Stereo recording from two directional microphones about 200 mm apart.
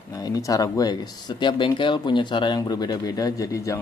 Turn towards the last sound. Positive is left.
turn(degrees=15)  # may be behind; listen again after turning